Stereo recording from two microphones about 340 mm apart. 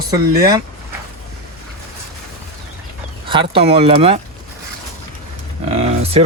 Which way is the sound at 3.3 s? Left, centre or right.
Centre.